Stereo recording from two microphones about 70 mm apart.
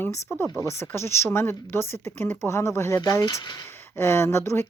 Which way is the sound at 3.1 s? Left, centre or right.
Left.